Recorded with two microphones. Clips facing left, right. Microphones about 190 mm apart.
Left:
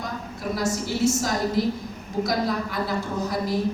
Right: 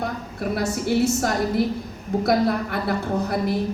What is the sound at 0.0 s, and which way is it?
A woman's voice, 60° right (ahead or behind).